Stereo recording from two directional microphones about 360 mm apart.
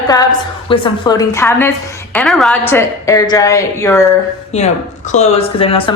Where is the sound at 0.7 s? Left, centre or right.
Centre.